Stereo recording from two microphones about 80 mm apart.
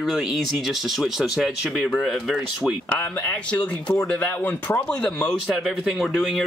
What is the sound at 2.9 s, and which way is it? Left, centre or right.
Speech, centre.